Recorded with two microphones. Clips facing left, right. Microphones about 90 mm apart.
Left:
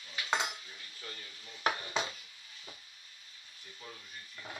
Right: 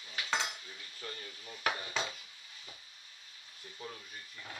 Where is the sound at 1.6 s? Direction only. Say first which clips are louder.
Left 2 dB; 20° left (ahead or behind).